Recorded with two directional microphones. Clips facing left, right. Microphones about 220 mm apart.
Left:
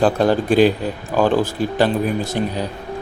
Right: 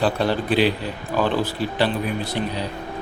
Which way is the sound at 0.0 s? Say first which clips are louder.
Left 5 dB; 45° left (ahead or behind).